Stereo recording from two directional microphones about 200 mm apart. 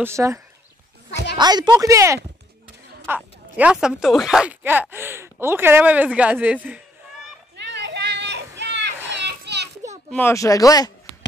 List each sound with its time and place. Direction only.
0.0 s speech: 15° right (ahead or behind)
1.4 s speech: 20° right (ahead or behind)
3.2 s speech: 5° right (ahead or behind)
7.5 s a sound: 60° right (ahead or behind)
9.1 s children playing: 60° right (ahead or behind)
10.1 s speech: 15° left (ahead or behind)